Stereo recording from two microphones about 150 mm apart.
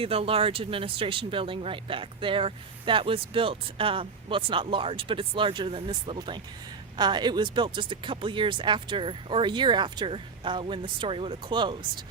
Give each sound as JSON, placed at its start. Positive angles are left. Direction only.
{"t": 0.0, "sound": "speech", "side_deg": -40}